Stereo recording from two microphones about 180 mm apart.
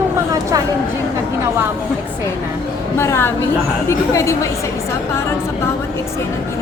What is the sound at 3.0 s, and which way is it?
A woman's voice, 15° left (ahead or behind).